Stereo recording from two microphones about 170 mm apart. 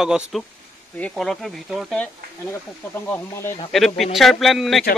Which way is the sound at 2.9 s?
15° left (ahead or behind).